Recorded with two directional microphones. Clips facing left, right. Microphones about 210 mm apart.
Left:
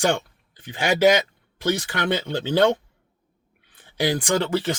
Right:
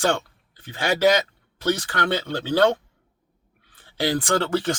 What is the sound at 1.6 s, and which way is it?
Speech, 15° left (ahead or behind).